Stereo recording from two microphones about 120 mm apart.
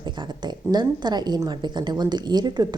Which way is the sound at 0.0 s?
40° right (ahead or behind).